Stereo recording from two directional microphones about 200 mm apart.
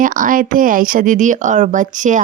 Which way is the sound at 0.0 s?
40° right (ahead or behind).